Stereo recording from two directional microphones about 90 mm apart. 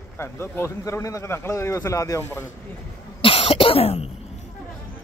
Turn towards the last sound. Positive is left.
turn(degrees=90)